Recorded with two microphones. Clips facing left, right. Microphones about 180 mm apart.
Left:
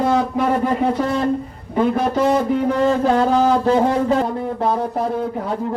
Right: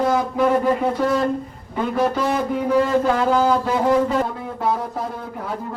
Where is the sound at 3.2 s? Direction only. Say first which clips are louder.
Left 2 dB; 35° left (ahead or behind).